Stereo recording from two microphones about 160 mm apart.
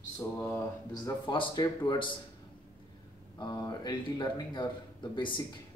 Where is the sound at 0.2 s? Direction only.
15° left (ahead or behind).